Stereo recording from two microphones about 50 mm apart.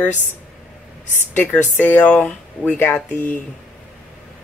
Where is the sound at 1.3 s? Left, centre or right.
Left.